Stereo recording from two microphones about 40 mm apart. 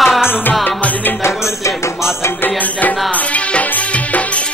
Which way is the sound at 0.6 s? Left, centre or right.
Left.